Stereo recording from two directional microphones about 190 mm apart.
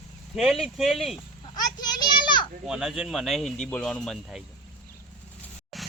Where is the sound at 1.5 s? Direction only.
20° left (ahead or behind).